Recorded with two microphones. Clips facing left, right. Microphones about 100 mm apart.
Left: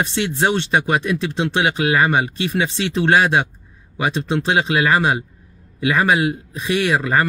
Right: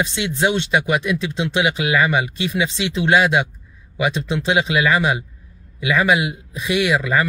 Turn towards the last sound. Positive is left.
turn(degrees=40)  # may be behind; listen again after turning